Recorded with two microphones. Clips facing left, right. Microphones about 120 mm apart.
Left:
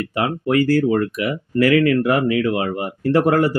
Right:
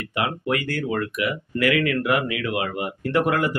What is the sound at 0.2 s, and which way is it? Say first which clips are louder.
Speech: left 6 dB; 35° left (ahead or behind).